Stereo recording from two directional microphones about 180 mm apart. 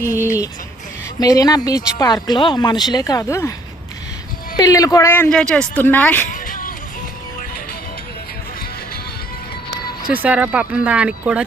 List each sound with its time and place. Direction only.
0.0 s speech: 15° left (ahead or behind)
4.5 s speech: 20° left (ahead or behind)
6.5 s music: 50° left (ahead or behind)
10.1 s speech: 10° right (ahead or behind)